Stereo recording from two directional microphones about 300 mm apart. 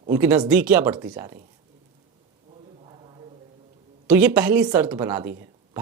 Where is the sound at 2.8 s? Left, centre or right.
Centre.